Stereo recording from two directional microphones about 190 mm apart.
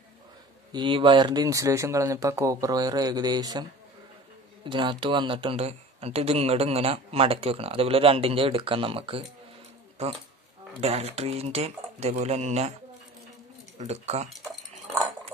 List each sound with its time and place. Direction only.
0.7 s speech: 25° right (ahead or behind)
4.6 s speech: 25° right (ahead or behind)
10.7 s speech: 30° right (ahead or behind)
13.7 s speech: 35° right (ahead or behind)